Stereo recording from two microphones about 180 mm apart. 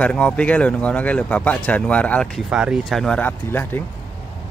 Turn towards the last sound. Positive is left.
turn(degrees=10)  # may be behind; listen again after turning